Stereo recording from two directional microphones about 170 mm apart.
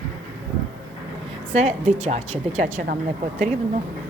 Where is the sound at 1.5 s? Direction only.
40° right (ahead or behind).